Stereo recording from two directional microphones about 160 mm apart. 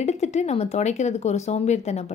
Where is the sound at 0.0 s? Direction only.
45° left (ahead or behind).